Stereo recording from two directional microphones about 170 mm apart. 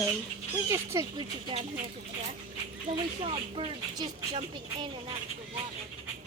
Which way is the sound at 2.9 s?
30° right (ahead or behind).